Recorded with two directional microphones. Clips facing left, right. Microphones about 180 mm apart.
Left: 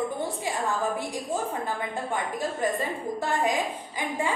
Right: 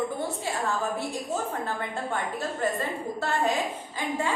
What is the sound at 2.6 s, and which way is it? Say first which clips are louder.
Speech: even; 15° left (ahead or behind).